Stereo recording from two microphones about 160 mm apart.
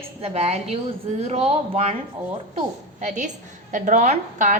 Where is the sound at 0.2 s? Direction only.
40° right (ahead or behind).